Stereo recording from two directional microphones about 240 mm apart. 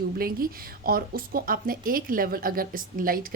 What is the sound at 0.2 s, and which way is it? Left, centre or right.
A woman's voice, right.